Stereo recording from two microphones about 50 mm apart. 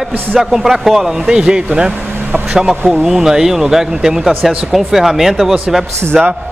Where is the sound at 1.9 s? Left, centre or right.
Right.